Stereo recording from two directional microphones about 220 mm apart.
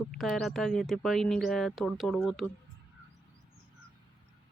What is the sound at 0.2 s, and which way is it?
Speech, centre (ahead or behind).